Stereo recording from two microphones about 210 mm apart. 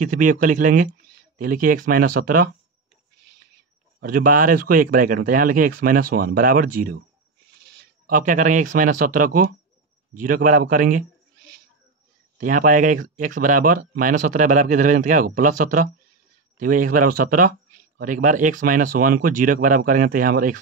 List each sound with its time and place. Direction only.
0.0 s speech: 40° right (ahead or behind)
4.0 s speech: 40° right (ahead or behind)
8.1 s speech: 40° right (ahead or behind)
12.4 s speech: 40° right (ahead or behind)